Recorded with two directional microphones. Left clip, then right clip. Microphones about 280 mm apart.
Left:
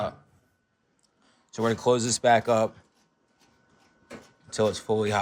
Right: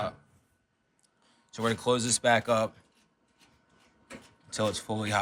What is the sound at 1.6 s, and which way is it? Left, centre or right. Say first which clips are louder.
Speech: left 4 dB; left.